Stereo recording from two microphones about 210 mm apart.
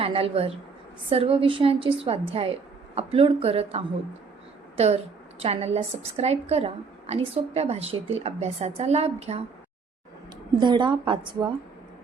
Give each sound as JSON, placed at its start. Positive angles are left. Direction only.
{"t": 0.0, "sound": "a woman's voice", "side_deg": -25}
{"t": 5.4, "sound": "a woman's voice", "side_deg": -30}
{"t": 10.6, "sound": "a woman's voice", "side_deg": -20}